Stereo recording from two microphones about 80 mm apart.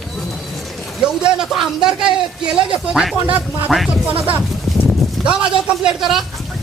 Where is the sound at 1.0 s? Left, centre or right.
Centre.